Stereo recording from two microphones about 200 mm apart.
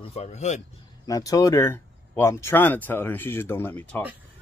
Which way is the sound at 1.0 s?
20° left (ahead or behind).